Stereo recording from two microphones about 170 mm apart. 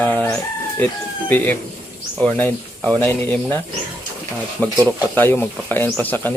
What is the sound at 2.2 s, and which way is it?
Speech, 5° left (ahead or behind).